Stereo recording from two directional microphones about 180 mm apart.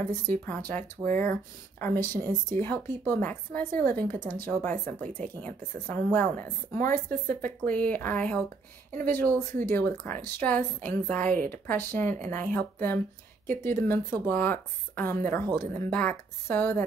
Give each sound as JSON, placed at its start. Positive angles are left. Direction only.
{"t": 0.0, "sound": "speech", "side_deg": 10}
{"t": 11.2, "sound": "speech", "side_deg": -50}
{"t": 11.5, "sound": "speech", "side_deg": 10}
{"t": 15.4, "sound": "speech", "side_deg": -25}
{"t": 15.9, "sound": "speech", "side_deg": 10}